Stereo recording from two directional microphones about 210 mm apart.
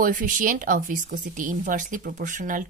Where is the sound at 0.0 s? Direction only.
40° right (ahead or behind).